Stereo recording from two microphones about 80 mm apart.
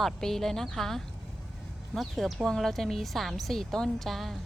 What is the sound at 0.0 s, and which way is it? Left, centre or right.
Speech, centre.